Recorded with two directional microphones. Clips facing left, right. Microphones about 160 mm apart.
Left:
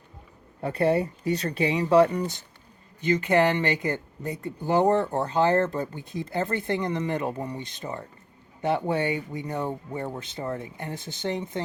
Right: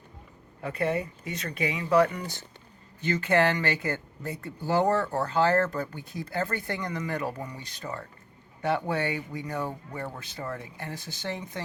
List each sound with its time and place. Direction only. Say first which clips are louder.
0.6 s speech: left 5 dB; 30° left (ahead or behind)
3.0 s speech: left 3 dB; 15° left (ahead or behind)